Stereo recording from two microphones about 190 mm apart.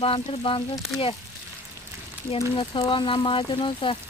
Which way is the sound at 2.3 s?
25° left (ahead or behind).